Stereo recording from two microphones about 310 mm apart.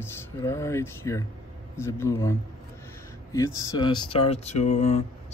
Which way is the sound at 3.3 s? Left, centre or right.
Centre.